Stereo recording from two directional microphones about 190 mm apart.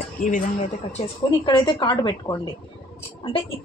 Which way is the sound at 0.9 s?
25° left (ahead or behind).